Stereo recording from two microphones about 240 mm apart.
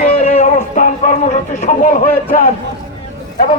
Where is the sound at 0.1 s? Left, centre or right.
Left.